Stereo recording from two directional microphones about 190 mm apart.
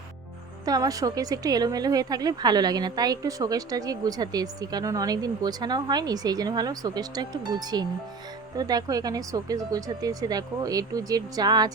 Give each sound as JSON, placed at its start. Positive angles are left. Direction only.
{"t": 0.6, "sound": "a woman's voice", "side_deg": -20}